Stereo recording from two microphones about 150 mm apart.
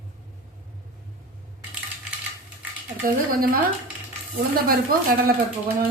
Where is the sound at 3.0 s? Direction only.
75° right (ahead or behind).